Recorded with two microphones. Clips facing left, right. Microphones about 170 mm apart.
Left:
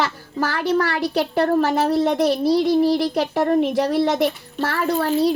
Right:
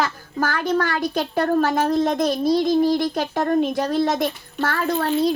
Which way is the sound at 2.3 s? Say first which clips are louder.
Left 1 dB; 70° left (ahead or behind).